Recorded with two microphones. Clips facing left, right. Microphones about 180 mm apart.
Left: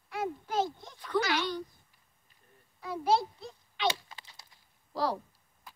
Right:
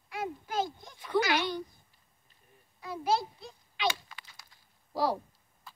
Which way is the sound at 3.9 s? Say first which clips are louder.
Left 2 dB; 30° left (ahead or behind).